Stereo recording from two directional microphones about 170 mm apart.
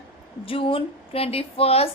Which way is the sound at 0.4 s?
30° left (ahead or behind).